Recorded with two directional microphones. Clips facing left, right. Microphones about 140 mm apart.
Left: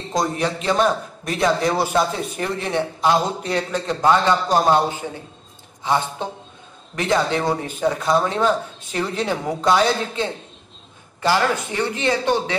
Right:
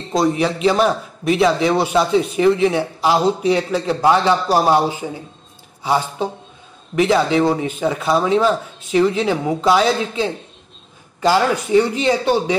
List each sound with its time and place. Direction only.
0.1 s a man's voice: 5° right (ahead or behind)
7.3 s speech: centre (ahead or behind)
11.1 s a man's voice: 15° right (ahead or behind)